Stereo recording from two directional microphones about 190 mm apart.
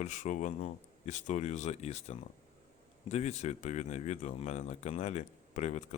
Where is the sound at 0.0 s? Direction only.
40° left (ahead or behind).